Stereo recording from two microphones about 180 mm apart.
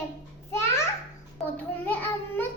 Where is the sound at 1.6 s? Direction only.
10° left (ahead or behind).